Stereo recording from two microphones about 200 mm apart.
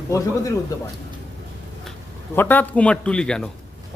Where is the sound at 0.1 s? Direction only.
15° left (ahead or behind).